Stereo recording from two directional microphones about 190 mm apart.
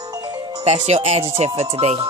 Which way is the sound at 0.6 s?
35° right (ahead or behind).